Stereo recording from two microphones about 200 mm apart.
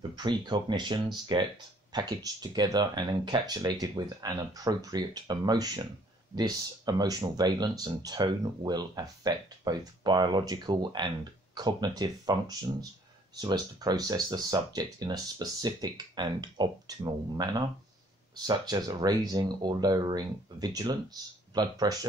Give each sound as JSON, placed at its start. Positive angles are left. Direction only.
{"t": 0.1, "sound": "speech", "side_deg": -20}